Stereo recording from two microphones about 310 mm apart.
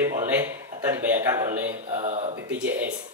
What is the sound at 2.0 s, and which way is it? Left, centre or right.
Speech, right.